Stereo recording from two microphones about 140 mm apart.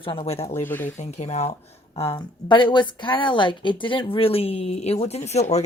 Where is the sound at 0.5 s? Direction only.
15° left (ahead or behind).